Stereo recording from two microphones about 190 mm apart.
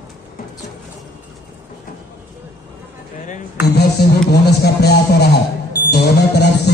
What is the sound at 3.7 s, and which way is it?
Music, 60° left (ahead or behind).